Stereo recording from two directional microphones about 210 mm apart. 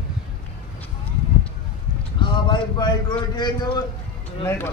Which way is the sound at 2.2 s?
20° left (ahead or behind).